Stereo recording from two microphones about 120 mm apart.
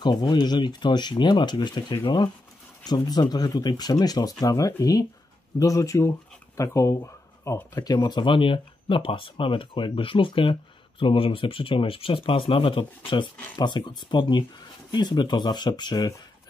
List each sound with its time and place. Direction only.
0.0 s speech: 35° left (ahead or behind)
7.7 s speech: 35° left (ahead or behind)